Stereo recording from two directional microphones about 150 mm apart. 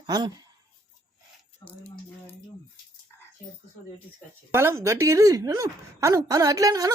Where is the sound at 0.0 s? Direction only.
30° right (ahead or behind).